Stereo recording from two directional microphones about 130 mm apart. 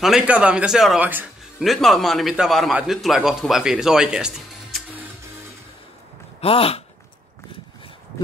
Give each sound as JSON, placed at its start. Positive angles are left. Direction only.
{"t": 0.0, "sound": "speech", "side_deg": -5}
{"t": 1.6, "sound": "a man's voice", "side_deg": 0}
{"t": 6.4, "sound": "speech", "side_deg": 45}